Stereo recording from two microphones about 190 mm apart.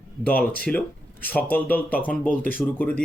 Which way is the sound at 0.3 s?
5° left (ahead or behind).